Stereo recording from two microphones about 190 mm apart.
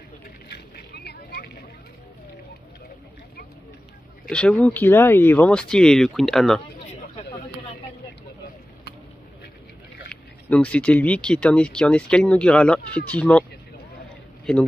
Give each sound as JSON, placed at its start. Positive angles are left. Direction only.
{"t": 0.5, "sound": "vehicle", "side_deg": 60}
{"t": 4.3, "sound": "speech", "side_deg": 5}
{"t": 10.5, "sound": "speech", "side_deg": 5}